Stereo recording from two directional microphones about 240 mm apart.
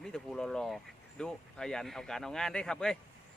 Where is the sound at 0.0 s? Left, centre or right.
Centre.